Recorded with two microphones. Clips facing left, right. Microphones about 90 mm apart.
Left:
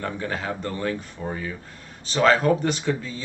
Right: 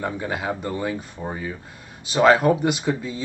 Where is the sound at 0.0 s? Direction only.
10° right (ahead or behind).